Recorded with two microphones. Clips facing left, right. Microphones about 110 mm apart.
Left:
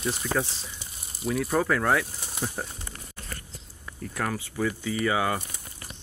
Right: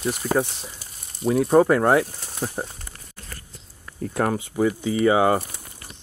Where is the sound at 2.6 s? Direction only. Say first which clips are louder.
Right 4 dB; 15° right (ahead or behind).